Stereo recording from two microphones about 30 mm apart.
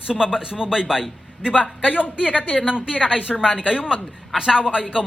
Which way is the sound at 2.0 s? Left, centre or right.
Left.